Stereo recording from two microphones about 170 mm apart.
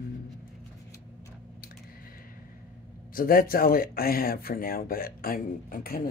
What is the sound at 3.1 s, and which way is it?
Speech, 60° left (ahead or behind).